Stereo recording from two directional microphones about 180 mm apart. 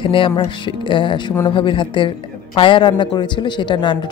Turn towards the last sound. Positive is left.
turn(degrees=25)  # may be behind; listen again after turning